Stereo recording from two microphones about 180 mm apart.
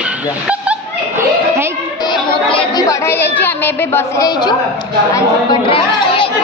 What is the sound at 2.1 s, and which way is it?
Chatter, 25° left (ahead or behind).